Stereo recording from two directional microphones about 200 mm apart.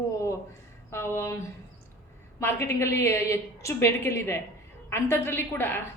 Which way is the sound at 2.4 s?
10° left (ahead or behind).